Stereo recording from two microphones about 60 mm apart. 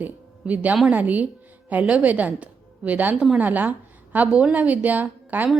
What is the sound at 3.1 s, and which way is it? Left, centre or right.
Speech, centre.